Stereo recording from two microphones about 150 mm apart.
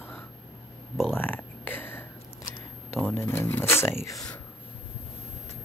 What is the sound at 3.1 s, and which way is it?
Speech, 15° left (ahead or behind).